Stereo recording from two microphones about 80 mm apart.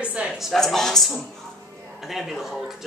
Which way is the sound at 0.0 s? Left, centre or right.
Centre.